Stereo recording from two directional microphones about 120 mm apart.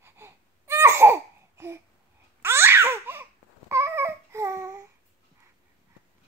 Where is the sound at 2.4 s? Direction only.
20° right (ahead or behind).